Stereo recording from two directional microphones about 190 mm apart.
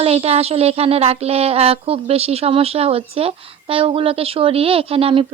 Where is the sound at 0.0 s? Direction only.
30° right (ahead or behind).